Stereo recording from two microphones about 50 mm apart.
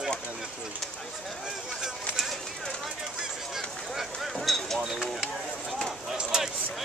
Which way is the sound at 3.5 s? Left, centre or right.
Centre.